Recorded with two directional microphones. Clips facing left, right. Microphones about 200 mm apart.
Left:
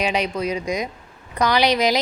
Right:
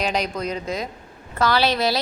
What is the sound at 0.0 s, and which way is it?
Speech, 10° left (ahead or behind).